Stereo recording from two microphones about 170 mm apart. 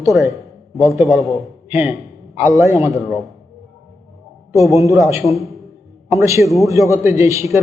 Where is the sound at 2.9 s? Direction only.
Centre (ahead or behind).